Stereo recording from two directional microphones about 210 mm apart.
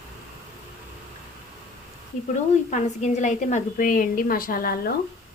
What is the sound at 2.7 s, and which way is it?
A woman's voice, 35° left (ahead or behind).